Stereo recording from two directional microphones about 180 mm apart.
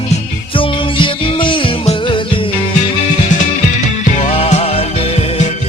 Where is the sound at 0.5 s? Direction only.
30° left (ahead or behind).